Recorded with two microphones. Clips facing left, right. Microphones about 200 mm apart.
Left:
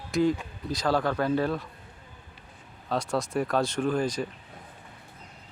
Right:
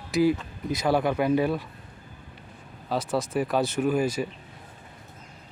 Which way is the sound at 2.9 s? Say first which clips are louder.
Right 1 dB; centre (ahead or behind).